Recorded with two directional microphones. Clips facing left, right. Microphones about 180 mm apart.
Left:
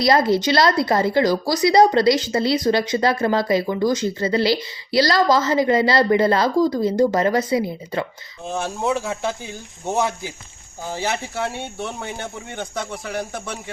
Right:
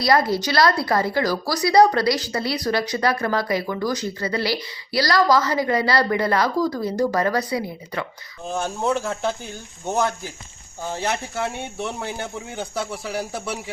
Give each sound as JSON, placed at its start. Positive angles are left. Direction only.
{"t": 0.0, "sound": "a woman's voice", "side_deg": 25}
{"t": 8.5, "sound": "speech", "side_deg": 0}